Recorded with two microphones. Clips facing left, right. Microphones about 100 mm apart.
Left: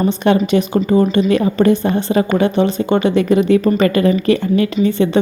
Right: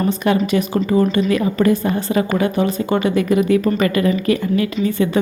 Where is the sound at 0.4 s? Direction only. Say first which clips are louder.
Left 3 dB; 25° left (ahead or behind).